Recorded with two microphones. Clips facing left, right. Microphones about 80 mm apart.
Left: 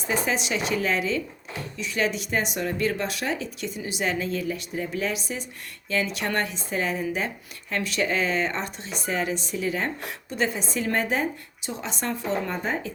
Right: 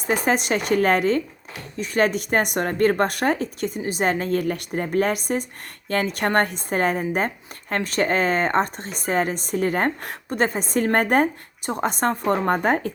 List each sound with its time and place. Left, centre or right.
0.1 s speech: right